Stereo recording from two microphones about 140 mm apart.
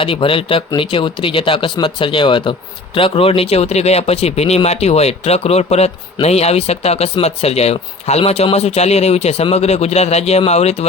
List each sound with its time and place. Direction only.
0.0 s speech: 40° left (ahead or behind)